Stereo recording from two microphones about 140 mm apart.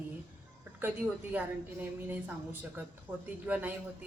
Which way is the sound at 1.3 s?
10° right (ahead or behind).